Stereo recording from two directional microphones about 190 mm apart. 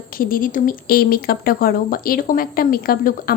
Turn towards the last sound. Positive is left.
turn(degrees=50)  # may be behind; listen again after turning